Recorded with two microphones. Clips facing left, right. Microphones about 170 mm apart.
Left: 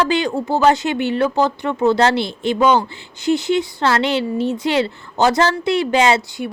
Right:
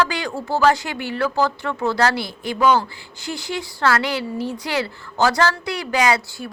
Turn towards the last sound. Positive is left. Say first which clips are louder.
# left 4 dB
turn(degrees=25)  # may be behind; listen again after turning